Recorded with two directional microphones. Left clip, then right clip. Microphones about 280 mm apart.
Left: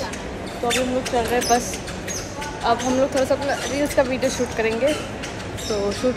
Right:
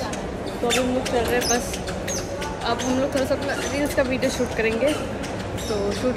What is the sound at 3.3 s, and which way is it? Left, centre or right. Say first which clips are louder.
Speech: left 2 dB; centre.